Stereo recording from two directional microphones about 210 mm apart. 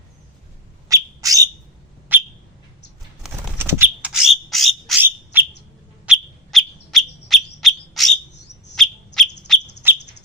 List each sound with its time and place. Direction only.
0.9 s bird: 15° right (ahead or behind)
2.1 s a sound: 10° right (ahead or behind)
4.9 s bird: 10° right (ahead or behind)
9.8 s bird: 10° right (ahead or behind)